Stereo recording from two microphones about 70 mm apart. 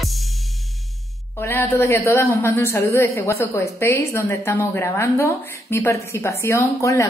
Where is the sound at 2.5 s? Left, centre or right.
Left.